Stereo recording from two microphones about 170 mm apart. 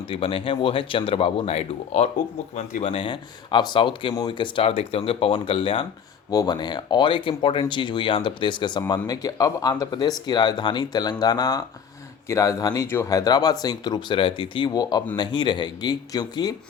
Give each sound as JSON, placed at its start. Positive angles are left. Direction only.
{"t": 0.1, "sound": "speech", "side_deg": 35}